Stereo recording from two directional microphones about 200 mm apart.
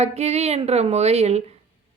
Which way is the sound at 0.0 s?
30° right (ahead or behind).